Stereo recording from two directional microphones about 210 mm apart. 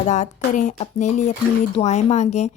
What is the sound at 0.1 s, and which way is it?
Speech, 35° left (ahead or behind).